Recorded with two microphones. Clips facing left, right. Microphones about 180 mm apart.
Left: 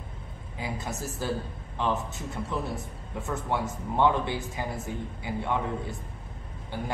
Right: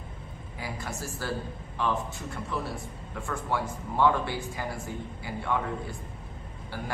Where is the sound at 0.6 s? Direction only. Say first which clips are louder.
Left 2 dB; 20° left (ahead or behind).